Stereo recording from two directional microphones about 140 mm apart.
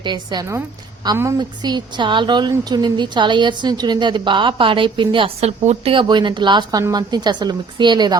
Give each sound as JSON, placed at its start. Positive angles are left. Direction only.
{"t": 0.0, "sound": "a woman's voice", "side_deg": -30}